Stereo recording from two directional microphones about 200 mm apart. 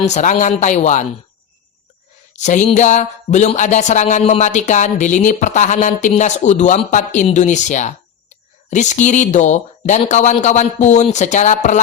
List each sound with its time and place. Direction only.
0.1 s speech: 35° left (ahead or behind)
2.3 s speech: 35° left (ahead or behind)